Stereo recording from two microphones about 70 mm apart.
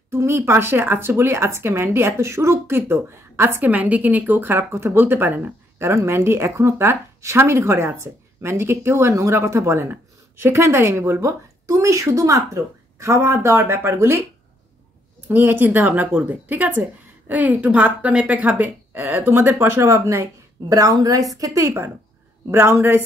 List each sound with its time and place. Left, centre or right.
0.1 s speech: right
15.2 s a woman's voice: right
22.5 s speech: right